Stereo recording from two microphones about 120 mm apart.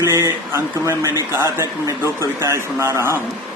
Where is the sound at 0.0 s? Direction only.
25° right (ahead or behind).